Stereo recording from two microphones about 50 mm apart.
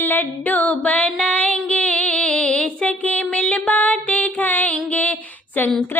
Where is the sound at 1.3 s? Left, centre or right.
Left.